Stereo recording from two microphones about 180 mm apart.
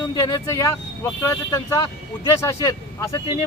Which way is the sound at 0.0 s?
20° left (ahead or behind).